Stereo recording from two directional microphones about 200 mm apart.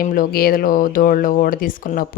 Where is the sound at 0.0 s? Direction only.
45° left (ahead or behind).